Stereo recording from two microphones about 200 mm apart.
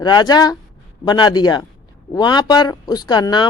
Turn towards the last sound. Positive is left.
turn(degrees=20)  # may be behind; listen again after turning